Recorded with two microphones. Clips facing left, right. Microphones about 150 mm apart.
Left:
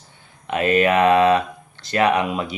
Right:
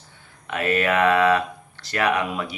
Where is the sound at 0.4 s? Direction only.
20° left (ahead or behind).